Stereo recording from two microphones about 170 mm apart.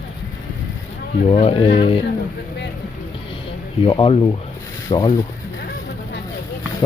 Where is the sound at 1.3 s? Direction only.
35° left (ahead or behind).